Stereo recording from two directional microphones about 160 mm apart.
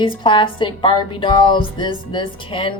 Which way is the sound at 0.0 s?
30° left (ahead or behind).